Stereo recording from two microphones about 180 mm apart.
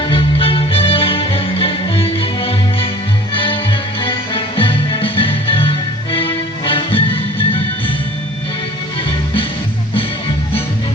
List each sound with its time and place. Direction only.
0.0 s music: 30° left (ahead or behind)